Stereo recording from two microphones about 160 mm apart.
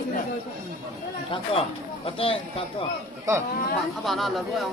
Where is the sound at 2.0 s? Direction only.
35° left (ahead or behind).